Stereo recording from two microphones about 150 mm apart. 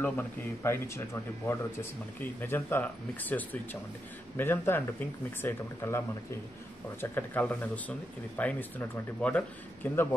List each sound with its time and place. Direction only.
0.0 s speech: 15° left (ahead or behind)